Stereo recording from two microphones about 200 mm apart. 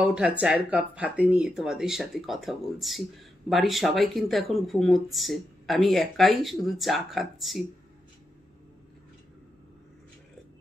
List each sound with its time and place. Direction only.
0.0 s speech: 5° right (ahead or behind)